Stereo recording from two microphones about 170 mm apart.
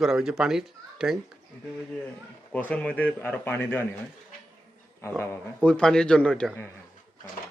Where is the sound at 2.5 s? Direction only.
10° left (ahead or behind).